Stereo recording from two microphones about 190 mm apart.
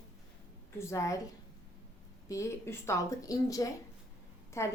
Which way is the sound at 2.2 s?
15° left (ahead or behind).